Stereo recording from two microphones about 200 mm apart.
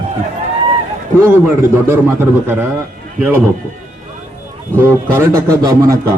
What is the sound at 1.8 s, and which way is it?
Speech, 10° right (ahead or behind).